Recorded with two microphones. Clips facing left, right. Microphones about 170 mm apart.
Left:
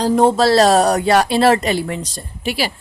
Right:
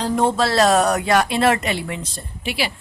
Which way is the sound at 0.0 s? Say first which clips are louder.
Left 5 dB; 35° left (ahead or behind).